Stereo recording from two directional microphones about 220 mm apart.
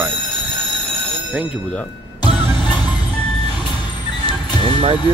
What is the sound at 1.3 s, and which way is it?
Speech, 5° right (ahead or behind).